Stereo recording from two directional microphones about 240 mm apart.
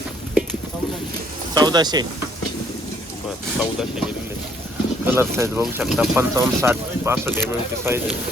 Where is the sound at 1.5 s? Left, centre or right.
Centre.